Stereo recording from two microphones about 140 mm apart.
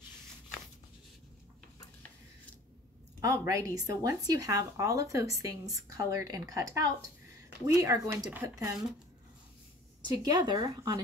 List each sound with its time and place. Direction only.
3.2 s speech: 25° right (ahead or behind)
10.1 s speech: 30° right (ahead or behind)